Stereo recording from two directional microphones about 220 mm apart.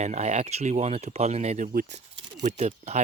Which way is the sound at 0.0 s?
30° right (ahead or behind).